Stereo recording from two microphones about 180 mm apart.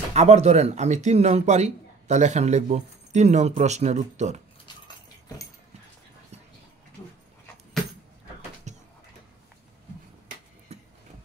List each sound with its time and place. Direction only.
0.1 s speech: 35° right (ahead or behind)
8.7 s a sound: 40° right (ahead or behind)
10.7 s vehicle: 35° right (ahead or behind)